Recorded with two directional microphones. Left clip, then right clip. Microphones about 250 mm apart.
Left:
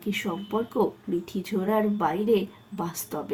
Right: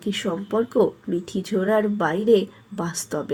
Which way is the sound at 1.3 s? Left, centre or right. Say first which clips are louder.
Right 6 dB; centre.